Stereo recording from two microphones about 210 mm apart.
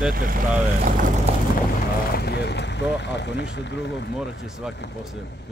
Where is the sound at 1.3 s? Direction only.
30° right (ahead or behind).